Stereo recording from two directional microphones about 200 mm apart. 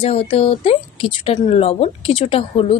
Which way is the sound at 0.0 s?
30° left (ahead or behind).